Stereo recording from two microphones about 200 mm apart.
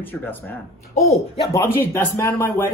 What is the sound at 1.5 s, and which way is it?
Speech, 15° left (ahead or behind).